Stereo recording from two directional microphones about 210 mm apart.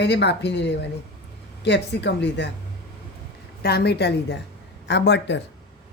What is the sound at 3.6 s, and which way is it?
Speech, 50° left (ahead or behind).